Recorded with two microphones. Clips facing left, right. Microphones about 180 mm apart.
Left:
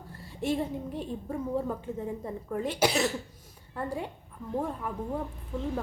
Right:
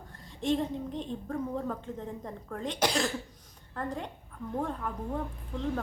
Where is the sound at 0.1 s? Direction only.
10° left (ahead or behind).